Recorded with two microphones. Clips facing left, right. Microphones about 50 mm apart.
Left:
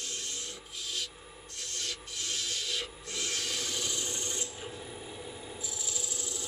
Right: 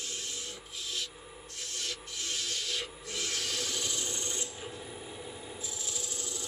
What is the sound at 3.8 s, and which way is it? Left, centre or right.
Rub, left.